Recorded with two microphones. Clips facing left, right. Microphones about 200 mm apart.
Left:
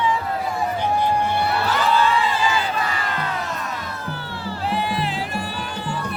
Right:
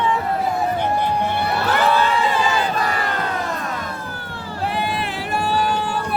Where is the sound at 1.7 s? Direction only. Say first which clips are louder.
Right 4 dB; 60° right (ahead or behind).